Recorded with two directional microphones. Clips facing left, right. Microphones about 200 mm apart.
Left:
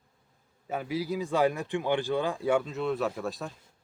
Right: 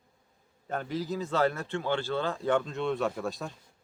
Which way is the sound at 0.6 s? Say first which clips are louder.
Left 1 dB; 10° left (ahead or behind).